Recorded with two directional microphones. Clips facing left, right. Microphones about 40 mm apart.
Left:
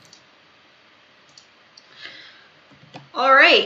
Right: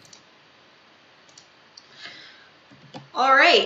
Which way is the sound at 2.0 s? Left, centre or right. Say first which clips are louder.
Left 2 dB; centre.